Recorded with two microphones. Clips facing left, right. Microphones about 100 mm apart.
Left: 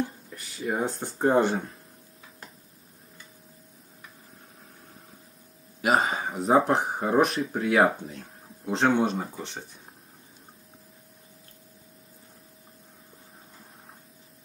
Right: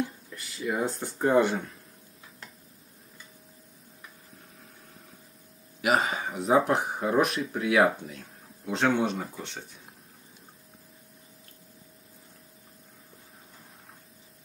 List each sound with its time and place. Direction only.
0.0 s a sound: 30° left (ahead or behind)
0.8 s speech: 25° left (ahead or behind)
5.8 s speech: 35° left (ahead or behind)
9.0 s speech: 40° left (ahead or behind)
9.3 s speech: 15° left (ahead or behind)